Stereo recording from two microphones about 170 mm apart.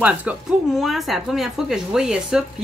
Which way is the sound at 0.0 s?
5° right (ahead or behind).